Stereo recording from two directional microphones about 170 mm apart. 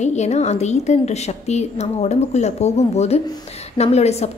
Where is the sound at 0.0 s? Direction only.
40° left (ahead or behind).